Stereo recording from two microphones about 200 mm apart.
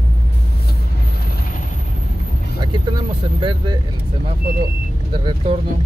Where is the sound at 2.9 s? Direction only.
25° right (ahead or behind).